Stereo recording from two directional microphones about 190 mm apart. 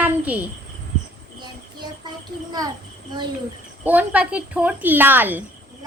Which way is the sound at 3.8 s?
10° right (ahead or behind).